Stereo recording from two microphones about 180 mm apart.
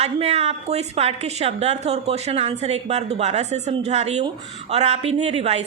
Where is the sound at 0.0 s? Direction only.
35° right (ahead or behind).